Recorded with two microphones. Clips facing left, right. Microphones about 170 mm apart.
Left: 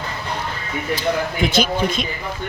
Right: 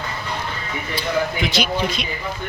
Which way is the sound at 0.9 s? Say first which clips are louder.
Even; 50° left (ahead or behind).